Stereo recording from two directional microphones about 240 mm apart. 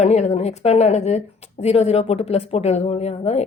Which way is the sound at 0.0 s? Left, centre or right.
Left.